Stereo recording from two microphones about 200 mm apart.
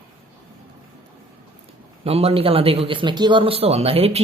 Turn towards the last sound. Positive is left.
turn(degrees=-30)  # may be behind; listen again after turning